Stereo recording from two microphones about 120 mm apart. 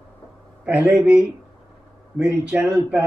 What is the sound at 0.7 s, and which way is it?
Speech, 15° right (ahead or behind).